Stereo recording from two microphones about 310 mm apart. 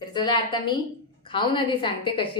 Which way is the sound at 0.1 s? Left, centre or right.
Centre.